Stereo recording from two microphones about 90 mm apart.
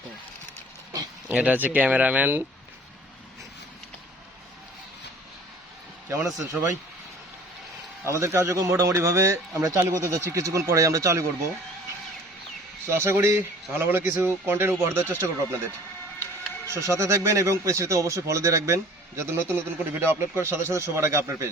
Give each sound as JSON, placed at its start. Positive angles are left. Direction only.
{"t": 1.3, "sound": "speech", "side_deg": -15}
{"t": 6.3, "sound": "speech", "side_deg": -35}
{"t": 8.0, "sound": "speech", "side_deg": -35}
{"t": 12.9, "sound": "a man's voice", "side_deg": -30}